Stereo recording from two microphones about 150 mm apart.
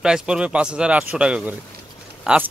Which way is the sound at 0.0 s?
5° right (ahead or behind).